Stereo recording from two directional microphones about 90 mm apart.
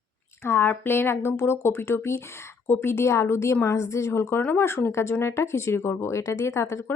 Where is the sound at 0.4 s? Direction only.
25° left (ahead or behind).